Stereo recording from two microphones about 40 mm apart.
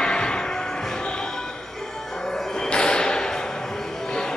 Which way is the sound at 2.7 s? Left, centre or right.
Left.